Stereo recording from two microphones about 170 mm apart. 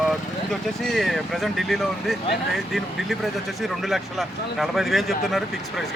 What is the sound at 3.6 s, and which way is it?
Speech, centre (ahead or behind).